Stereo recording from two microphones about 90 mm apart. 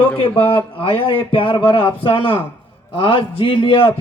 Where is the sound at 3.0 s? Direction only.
75° left (ahead or behind).